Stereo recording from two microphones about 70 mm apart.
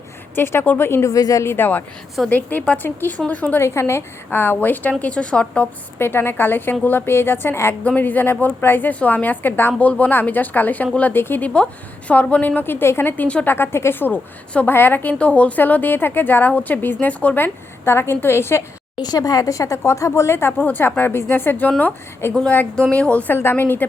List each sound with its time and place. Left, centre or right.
0.3 s speech: left
1.0 s a woman's voice: left
1.5 s a woman's voice: left
3.6 s a woman's voice: left; by 5.6 s centre
6.0 s speech: left
7.9 s a woman's voice: left
13.2 s a woman's voice: centre
13.5 s a woman's voice: left
18.9 s a woman's voice: left; by 23.3 s centre
23.3 s speech: left